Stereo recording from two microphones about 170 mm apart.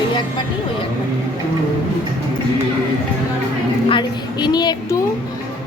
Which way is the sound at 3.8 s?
30° left (ahead or behind).